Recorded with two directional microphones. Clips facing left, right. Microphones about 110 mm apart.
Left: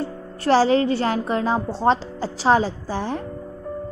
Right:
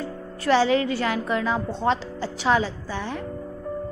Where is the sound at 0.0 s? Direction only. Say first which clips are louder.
Left 3 dB; 35° left (ahead or behind).